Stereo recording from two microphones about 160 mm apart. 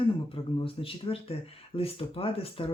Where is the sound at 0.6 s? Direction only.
35° left (ahead or behind).